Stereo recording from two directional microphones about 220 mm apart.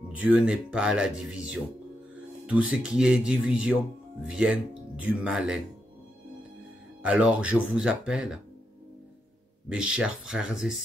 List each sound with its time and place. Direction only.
0.3 s speech: 5° right (ahead or behind)
7.0 s speech: 5° right (ahead or behind)
9.7 s speech: 5° right (ahead or behind)